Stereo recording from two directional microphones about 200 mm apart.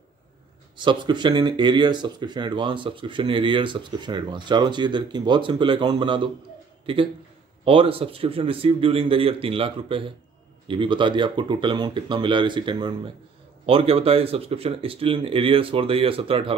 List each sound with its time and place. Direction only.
0.7 s speech: 25° right (ahead or behind)
7.6 s speech: 25° right (ahead or behind)